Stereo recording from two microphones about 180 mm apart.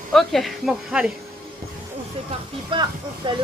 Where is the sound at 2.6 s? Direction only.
25° right (ahead or behind).